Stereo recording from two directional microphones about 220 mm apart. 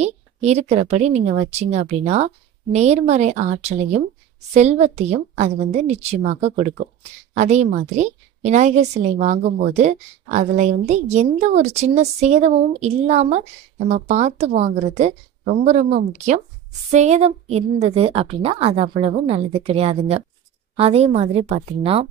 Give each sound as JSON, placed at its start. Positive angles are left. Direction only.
{"t": 0.0, "sound": "a woman's voice", "side_deg": -30}